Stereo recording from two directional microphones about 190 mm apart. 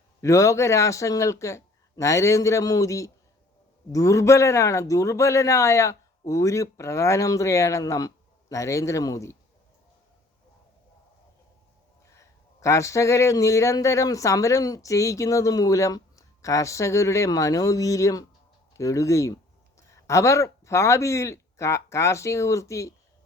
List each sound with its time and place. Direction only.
0.2 s speech: 15° left (ahead or behind)
12.6 s speech: 15° left (ahead or behind)